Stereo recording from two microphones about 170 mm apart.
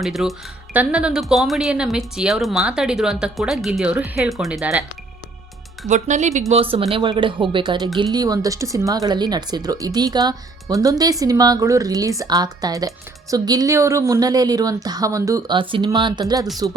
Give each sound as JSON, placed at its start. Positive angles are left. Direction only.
{"t": 0.0, "sound": "speech", "side_deg": 0}
{"t": 5.9, "sound": "speech", "side_deg": -45}
{"t": 6.5, "sound": "speech", "side_deg": -35}